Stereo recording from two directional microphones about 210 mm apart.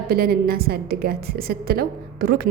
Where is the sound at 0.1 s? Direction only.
45° right (ahead or behind).